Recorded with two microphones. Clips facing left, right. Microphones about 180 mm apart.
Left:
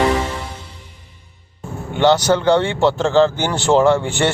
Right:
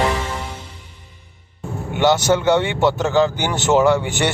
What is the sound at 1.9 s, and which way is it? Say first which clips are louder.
A man's voice: left 2 dB; 10° right (ahead or behind).